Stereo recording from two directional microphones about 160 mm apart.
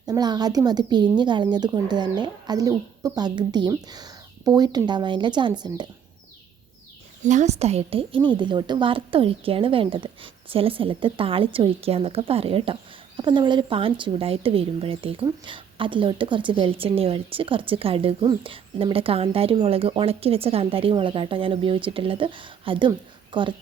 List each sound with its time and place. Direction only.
0.1 s speech: 25° right (ahead or behind)
7.3 s a woman's voice: 45° right (ahead or behind); by 23.6 s 30° right (ahead or behind)